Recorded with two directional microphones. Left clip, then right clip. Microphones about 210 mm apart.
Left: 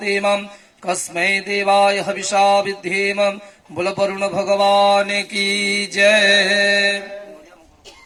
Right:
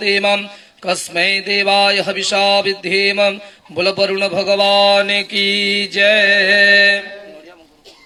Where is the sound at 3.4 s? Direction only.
40° right (ahead or behind).